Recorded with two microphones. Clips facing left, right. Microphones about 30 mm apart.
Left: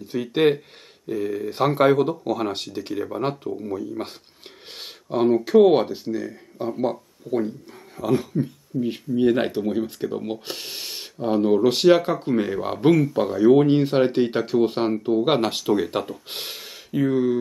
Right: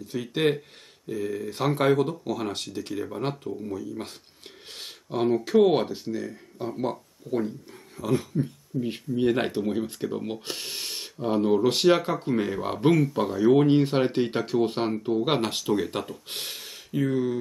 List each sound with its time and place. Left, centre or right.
0.3 s speech: centre
4.7 s speech: centre